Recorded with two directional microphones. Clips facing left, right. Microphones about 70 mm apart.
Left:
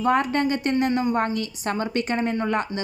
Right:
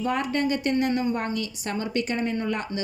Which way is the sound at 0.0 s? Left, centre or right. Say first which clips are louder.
Left 4 dB; left.